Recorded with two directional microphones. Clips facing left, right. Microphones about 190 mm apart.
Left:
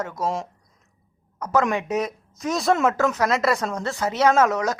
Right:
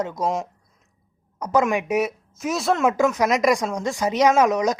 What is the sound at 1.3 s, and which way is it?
A woman's voice, 15° right (ahead or behind).